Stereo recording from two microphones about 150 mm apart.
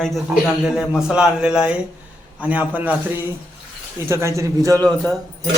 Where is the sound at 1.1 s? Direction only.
5° right (ahead or behind); by 5.1 s 25° right (ahead or behind).